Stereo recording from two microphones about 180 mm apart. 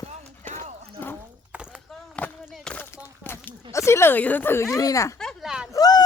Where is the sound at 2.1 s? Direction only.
10° left (ahead or behind).